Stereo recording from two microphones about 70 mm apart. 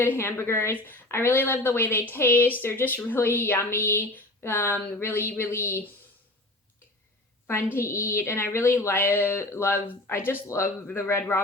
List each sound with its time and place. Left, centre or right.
0.0 s speech: left
7.4 s speech: left